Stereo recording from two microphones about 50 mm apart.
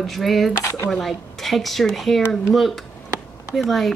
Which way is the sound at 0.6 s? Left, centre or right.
Left.